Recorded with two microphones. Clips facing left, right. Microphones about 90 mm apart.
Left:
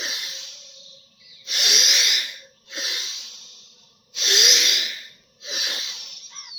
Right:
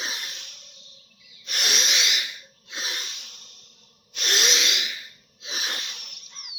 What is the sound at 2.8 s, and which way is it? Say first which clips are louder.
Snort: even; 35° right (ahead or behind).